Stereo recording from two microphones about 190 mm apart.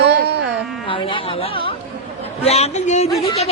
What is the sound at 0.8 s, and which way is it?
A woman's voice, 25° left (ahead or behind).